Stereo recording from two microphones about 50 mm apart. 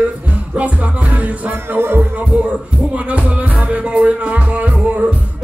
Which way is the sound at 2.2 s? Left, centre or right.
Right.